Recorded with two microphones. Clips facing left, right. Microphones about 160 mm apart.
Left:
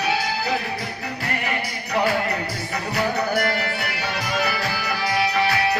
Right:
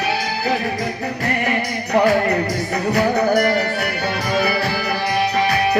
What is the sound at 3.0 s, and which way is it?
Music, 45° right (ahead or behind).